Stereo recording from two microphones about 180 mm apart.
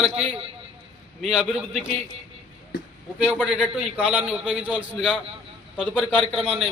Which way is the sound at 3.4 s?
5° right (ahead or behind).